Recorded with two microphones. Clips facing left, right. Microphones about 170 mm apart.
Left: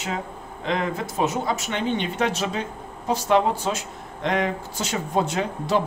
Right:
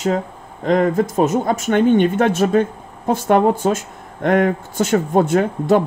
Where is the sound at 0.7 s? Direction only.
45° right (ahead or behind).